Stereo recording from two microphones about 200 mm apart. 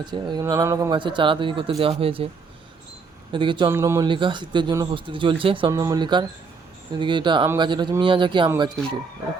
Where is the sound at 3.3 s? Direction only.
25° right (ahead or behind).